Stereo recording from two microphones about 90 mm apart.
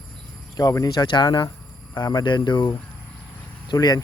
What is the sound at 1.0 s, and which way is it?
Speech, 55° left (ahead or behind).